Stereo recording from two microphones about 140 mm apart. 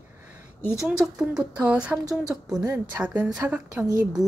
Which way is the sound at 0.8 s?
5° right (ahead or behind).